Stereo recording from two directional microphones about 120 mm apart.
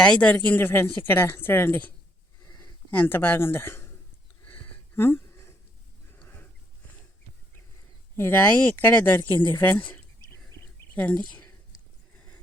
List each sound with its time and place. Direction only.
0.0 s speech: 10° left (ahead or behind)
2.9 s speech: 15° left (ahead or behind)
4.9 s speech: 20° left (ahead or behind)
6.1 s a sound: 15° left (ahead or behind)
8.1 s speech: 20° left (ahead or behind)